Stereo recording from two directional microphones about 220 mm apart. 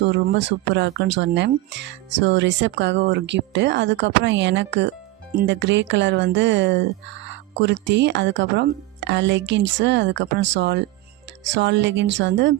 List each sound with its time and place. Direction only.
0.0 s speech: 55° right (ahead or behind)